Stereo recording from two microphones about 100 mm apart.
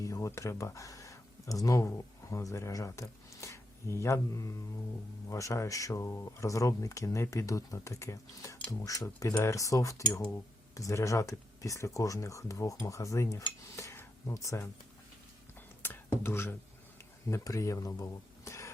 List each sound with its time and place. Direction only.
0.0 s speech: 30° left (ahead or behind)
15.8 s a sound: 20° left (ahead or behind)
17.2 s speech: 30° left (ahead or behind)